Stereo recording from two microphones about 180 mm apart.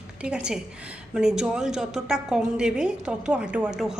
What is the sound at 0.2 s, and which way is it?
A woman's voice, 5° right (ahead or behind).